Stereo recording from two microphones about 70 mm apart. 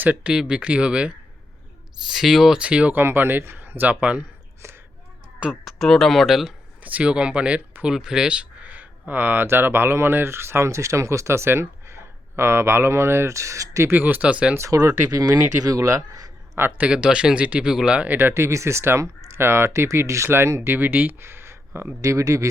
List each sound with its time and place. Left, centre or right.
0.0 s speech: right
0.3 s speech: centre
2.0 s speech: centre
2.9 s speech: right
4.6 s whispering: right
5.6 s speech: centre
6.8 s speech: centre; by 13.9 s right
13.9 s speech: right
14.7 s speech: right
16.6 s speech: right
16.8 s speech: centre
18.3 s speech: right
22.0 s speech: right